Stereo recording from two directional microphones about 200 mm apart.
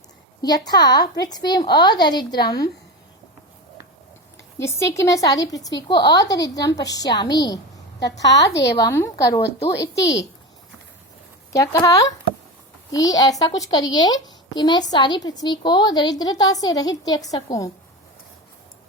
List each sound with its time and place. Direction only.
0.4 s a woman's voice: 20° left (ahead or behind)
4.5 s a woman's voice: 15° left (ahead or behind)
7.9 s a woman's voice: 60° left (ahead or behind)
8.8 s speech: 15° left (ahead or behind)
11.5 s a woman's voice: 15° left (ahead or behind)